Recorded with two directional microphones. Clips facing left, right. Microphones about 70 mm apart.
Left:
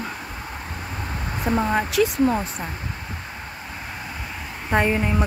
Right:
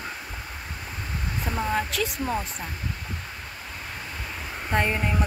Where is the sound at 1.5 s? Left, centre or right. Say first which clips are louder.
Left 5 dB; left.